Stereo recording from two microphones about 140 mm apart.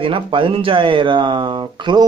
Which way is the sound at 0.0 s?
40° right (ahead or behind).